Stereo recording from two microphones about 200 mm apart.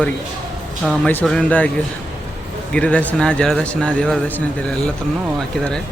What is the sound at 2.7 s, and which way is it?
A man's voice, 5° left (ahead or behind).